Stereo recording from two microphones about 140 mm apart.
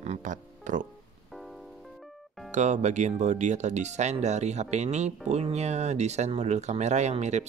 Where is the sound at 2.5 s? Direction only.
55° right (ahead or behind).